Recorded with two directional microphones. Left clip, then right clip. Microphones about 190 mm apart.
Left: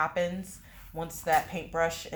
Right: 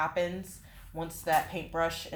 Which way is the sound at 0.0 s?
35° left (ahead or behind).